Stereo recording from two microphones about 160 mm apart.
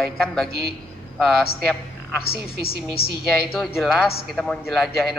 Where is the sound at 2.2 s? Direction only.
75° left (ahead or behind).